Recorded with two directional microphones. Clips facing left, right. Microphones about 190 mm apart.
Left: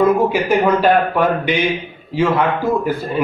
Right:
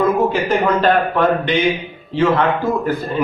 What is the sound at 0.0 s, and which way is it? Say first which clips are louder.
A man's voice: left 2 dB; 10° left (ahead or behind).